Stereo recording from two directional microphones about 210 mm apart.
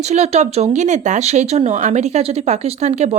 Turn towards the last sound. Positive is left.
turn(degrees=-30)  # may be behind; listen again after turning